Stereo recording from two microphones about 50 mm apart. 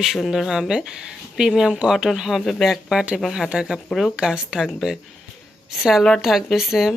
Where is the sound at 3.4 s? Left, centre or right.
Centre.